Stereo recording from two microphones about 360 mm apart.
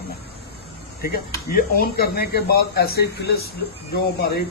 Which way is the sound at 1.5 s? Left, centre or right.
Left.